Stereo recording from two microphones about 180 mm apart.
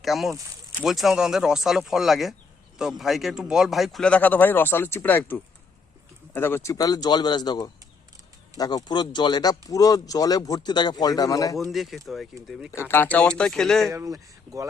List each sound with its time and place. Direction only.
0.0 s speech: centre (ahead or behind); by 11.5 s 20° left (ahead or behind)
11.5 s speech: centre (ahead or behind)
12.9 s speech: 10° left (ahead or behind)
13.9 s speech: 20° right (ahead or behind)